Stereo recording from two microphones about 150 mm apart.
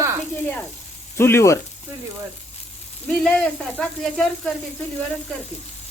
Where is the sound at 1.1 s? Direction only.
15° left (ahead or behind).